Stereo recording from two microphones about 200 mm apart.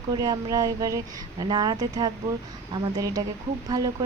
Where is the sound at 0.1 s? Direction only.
20° right (ahead or behind).